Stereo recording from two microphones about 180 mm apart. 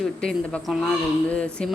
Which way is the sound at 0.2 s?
5° left (ahead or behind).